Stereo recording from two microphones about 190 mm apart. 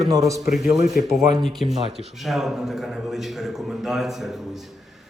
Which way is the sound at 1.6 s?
30° right (ahead or behind).